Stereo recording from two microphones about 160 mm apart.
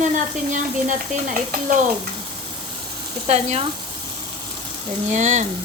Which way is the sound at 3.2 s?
45° right (ahead or behind).